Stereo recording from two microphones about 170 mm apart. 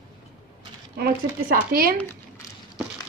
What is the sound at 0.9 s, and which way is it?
Speech, 60° right (ahead or behind).